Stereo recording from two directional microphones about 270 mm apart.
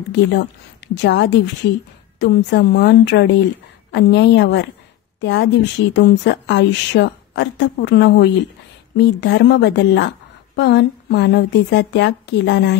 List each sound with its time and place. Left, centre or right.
0.1 s a woman's voice: left